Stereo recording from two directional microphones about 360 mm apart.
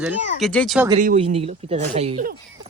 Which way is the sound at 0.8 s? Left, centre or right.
Centre.